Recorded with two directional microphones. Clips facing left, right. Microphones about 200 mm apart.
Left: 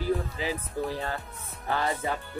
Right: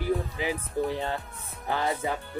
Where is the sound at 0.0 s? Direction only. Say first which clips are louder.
Right 1 dB; 15° right (ahead or behind).